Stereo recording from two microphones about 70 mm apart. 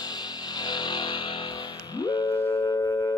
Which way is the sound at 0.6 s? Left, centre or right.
Left.